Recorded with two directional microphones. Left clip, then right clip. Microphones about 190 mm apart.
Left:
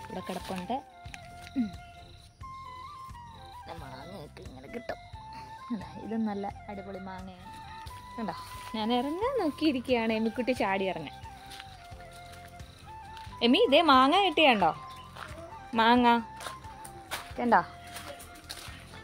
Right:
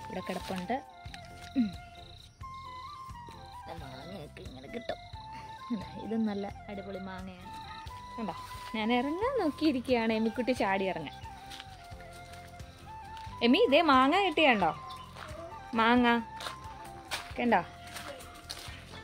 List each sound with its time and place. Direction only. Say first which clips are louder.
0.1 s speech: even; 5° left (ahead or behind)
1.6 s music: right 1 dB; 20° right (ahead or behind)
3.6 s speech: left 1 dB; centre (ahead or behind)
4.7 s music: even; 5° right (ahead or behind)
6.1 s speech: left 1 dB; 10° right (ahead or behind)
8.7 s speech: left 1 dB; 5° left (ahead or behind)
13.4 s speech: left 2 dB; 10° left (ahead or behind)
17.4 s speech: left 3 dB; 5° left (ahead or behind)